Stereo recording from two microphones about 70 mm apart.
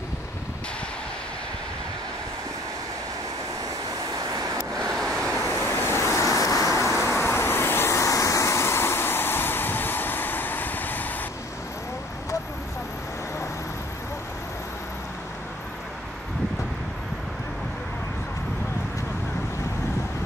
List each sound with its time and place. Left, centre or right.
4.7 s waves: centre
5.6 s vehicle: left